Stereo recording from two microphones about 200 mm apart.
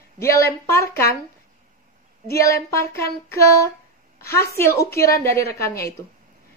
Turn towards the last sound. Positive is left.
turn(degrees=15)  # may be behind; listen again after turning